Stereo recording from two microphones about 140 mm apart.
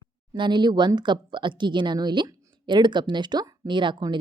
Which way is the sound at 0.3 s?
35° right (ahead or behind).